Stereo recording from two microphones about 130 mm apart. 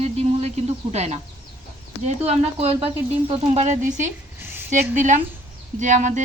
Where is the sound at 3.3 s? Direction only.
65° right (ahead or behind).